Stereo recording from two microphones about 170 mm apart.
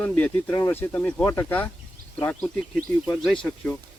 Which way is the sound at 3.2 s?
5° left (ahead or behind).